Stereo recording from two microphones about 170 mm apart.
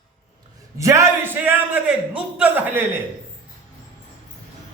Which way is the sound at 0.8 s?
15° right (ahead or behind).